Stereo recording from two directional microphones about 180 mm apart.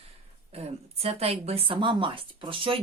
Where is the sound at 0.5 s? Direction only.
35° right (ahead or behind).